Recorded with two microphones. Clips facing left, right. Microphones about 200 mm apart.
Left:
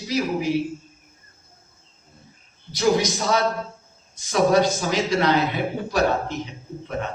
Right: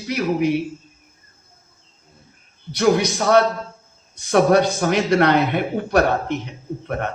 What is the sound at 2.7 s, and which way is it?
Speech, 60° right (ahead or behind).